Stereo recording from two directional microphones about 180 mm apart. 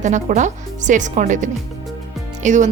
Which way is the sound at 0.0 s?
40° right (ahead or behind).